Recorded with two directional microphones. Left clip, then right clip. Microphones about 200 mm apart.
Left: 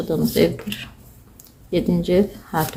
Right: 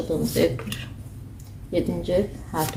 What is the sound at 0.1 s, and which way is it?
Speech, 30° left (ahead or behind).